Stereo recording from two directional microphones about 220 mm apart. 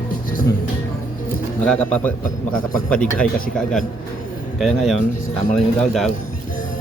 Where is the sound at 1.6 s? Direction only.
5° left (ahead or behind).